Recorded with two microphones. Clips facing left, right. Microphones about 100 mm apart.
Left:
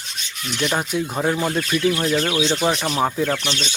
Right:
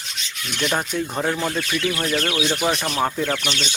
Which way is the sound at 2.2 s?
20° left (ahead or behind).